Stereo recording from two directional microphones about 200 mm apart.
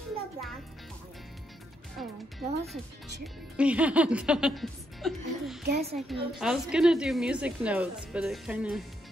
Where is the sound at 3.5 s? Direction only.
5° right (ahead or behind).